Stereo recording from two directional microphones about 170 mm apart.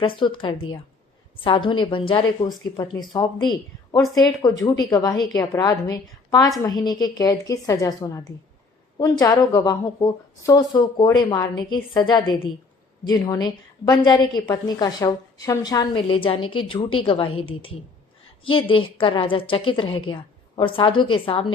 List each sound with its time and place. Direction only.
0.0 s a woman's voice: 30° left (ahead or behind)